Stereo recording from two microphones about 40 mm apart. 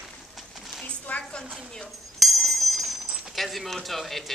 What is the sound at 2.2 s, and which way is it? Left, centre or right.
Bell, centre.